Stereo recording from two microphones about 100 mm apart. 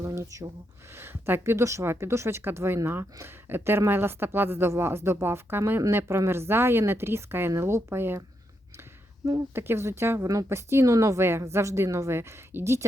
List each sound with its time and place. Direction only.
0.0 s a sound: 30° right (ahead or behind)
0.9 s a woman's voice: 25° right (ahead or behind)
9.2 s a woman's voice: 25° right (ahead or behind)